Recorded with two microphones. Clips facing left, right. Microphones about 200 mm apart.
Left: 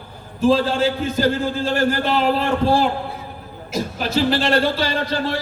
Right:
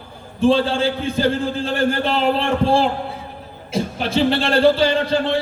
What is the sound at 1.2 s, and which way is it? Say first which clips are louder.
A man's voice: even; 30° right (ahead or behind).